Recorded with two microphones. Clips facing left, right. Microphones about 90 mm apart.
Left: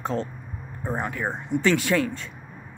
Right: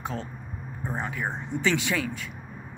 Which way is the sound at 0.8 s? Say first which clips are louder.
Left 4 dB; 15° left (ahead or behind).